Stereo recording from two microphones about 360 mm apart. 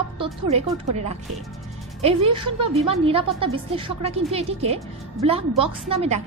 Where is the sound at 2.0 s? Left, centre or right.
Centre.